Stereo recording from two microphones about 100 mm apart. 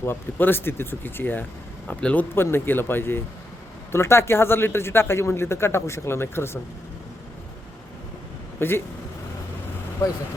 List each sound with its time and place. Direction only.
0.0 s a man's voice: 20° left (ahead or behind)
2.3 s speech: 25° left (ahead or behind)
8.5 s speech: 20° left (ahead or behind)